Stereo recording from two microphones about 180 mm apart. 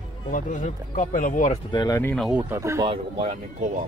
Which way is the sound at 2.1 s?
Centre (ahead or behind).